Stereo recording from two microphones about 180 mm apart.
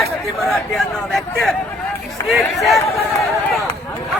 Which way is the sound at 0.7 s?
Centre (ahead or behind).